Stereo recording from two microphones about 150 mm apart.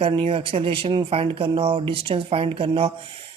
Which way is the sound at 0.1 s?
35° right (ahead or behind).